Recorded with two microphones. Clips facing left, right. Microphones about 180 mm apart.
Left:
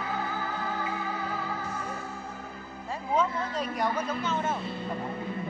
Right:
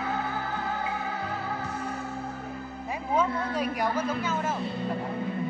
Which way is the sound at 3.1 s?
10° right (ahead or behind).